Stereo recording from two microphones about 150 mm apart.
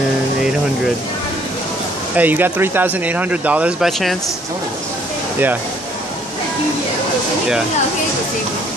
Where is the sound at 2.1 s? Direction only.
10° right (ahead or behind).